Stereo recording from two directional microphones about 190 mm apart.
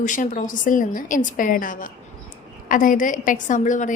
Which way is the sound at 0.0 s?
40° left (ahead or behind).